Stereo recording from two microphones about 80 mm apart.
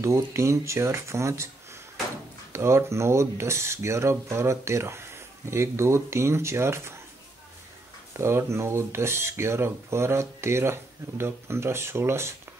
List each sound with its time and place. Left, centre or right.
0.0 s speech: right
2.5 s speech: right
8.1 s speech: right